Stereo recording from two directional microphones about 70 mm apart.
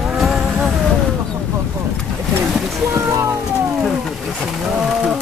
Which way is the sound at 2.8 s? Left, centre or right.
Right.